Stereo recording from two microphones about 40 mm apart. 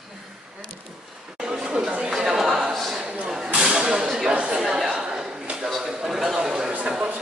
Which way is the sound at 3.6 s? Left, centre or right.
Right.